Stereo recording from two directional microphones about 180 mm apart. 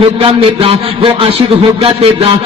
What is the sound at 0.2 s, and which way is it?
A man's voice, 30° right (ahead or behind).